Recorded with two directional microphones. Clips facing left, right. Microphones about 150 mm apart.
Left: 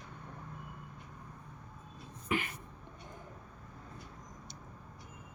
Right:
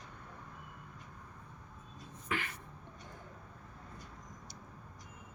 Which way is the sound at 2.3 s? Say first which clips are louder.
Left 4 dB; 15° left (ahead or behind).